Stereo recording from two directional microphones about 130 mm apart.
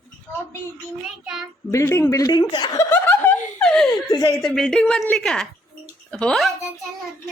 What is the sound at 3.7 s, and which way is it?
Laughter, 5° left (ahead or behind).